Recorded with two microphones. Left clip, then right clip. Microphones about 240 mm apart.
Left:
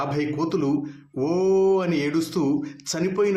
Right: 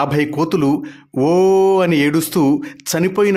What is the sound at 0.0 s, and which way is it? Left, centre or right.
A man's voice, right.